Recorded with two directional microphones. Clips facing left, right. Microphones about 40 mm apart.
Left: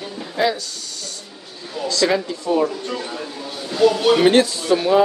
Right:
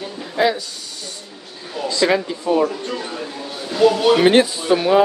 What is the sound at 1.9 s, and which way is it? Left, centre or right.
Speech, centre.